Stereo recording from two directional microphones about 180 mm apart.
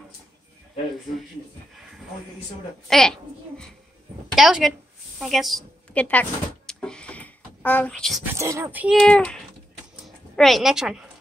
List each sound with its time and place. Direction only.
2.9 s a child's voice: 5° left (ahead or behind)
5.9 s a sound: 10° left (ahead or behind)
8.3 s speech: 15° right (ahead or behind)
8.8 s a child's voice: centre (ahead or behind)